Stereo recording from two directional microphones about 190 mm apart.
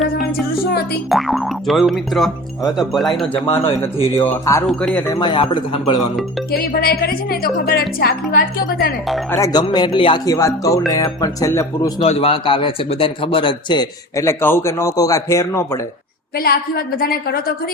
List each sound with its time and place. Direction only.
1.1 s speech: centre (ahead or behind)
4.2 s speech: 10° left (ahead or behind)
6.5 s a woman's voice: 55° left (ahead or behind)
9.3 s speech: 20° left (ahead or behind)
12.0 s speech: 30° left (ahead or behind)
16.4 s a woman's voice: 55° left (ahead or behind)